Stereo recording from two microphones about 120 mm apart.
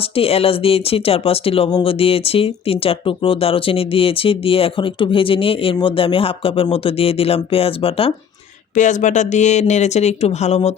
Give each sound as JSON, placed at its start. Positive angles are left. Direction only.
{"t": 0.2, "sound": "speech", "side_deg": 55}
{"t": 8.7, "sound": "speech", "side_deg": 90}